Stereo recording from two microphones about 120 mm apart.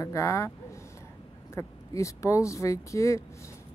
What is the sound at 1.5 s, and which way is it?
Speech, 25° left (ahead or behind).